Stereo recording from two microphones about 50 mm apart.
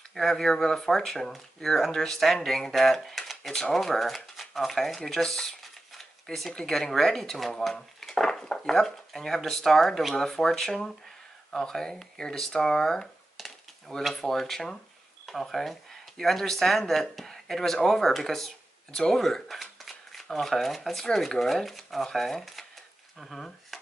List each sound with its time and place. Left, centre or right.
0.1 s speech: centre
5.6 s a sound: centre
6.5 s speech: centre
18.9 s speech: centre
19.1 s shuffling cards: centre
20.3 s speech: centre